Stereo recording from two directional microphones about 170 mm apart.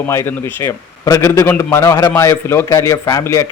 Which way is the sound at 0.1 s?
15° left (ahead or behind).